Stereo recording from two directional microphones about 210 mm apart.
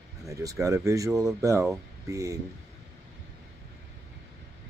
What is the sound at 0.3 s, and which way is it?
Speech, 15° right (ahead or behind).